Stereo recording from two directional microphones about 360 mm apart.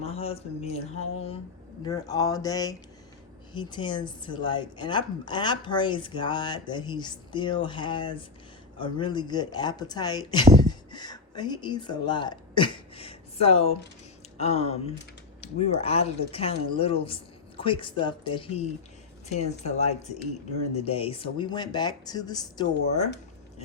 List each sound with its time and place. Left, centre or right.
0.0 s a woman's voice: centre
1.8 s a woman's voice: centre